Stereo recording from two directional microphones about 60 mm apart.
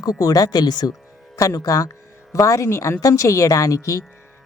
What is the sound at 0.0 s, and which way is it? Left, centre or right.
Speech, left.